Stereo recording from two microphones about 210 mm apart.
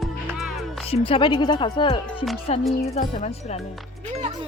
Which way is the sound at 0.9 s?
25° left (ahead or behind).